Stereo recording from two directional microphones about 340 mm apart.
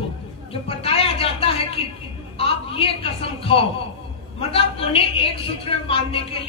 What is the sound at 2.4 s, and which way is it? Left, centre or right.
Speech, centre.